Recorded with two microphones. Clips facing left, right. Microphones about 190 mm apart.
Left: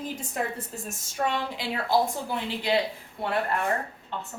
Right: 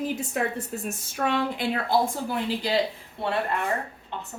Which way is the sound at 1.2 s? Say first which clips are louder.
Right 4 dB; 60° right (ahead or behind).